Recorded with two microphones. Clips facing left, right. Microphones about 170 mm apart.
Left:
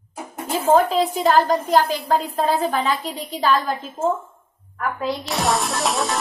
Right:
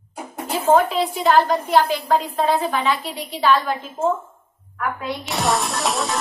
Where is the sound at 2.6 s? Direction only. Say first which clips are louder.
Even; 40° left (ahead or behind).